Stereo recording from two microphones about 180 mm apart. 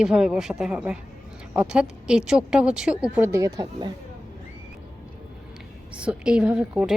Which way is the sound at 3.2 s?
15° right (ahead or behind).